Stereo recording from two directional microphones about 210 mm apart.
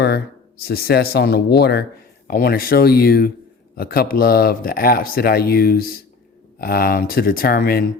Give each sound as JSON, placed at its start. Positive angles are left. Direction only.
{"t": 0.0, "sound": "speech", "side_deg": 50}